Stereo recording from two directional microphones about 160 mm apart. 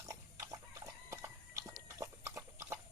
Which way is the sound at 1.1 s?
20° right (ahead or behind).